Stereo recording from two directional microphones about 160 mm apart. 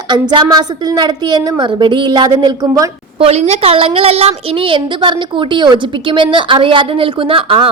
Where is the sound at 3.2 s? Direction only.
40° right (ahead or behind).